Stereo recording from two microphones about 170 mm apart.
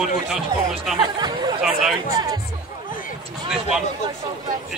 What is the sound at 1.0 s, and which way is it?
Speech, 25° right (ahead or behind).